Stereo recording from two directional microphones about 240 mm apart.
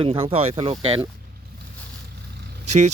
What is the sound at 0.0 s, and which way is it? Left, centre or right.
Speech, right.